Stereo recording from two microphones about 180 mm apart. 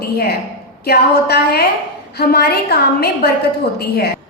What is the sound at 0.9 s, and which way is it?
A woman's voice, 60° left (ahead or behind).